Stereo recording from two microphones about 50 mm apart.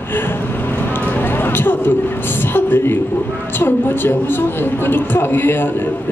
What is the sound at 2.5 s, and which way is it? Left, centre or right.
A woman's voice, left.